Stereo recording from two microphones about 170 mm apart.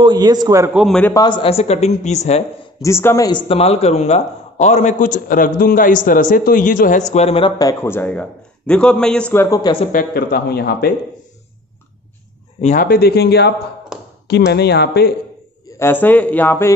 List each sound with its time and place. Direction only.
0.0 s a man's voice: 25° right (ahead or behind)
0.7 s a man's voice: 5° left (ahead or behind)
1.1 s a man's voice: 25° left (ahead or behind)
2.8 s speech: 15° left (ahead or behind)
3.3 s a man's voice: 30° left (ahead or behind)
9.9 s speech: 65° left (ahead or behind)
12.5 s speech: 50° left (ahead or behind); by 15.1 s 75° left (ahead or behind)
15.8 s speech: 10° left (ahead or behind)